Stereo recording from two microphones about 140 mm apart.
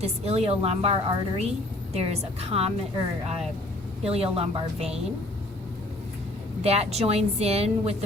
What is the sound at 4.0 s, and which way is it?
A woman's voice, 45° right (ahead or behind).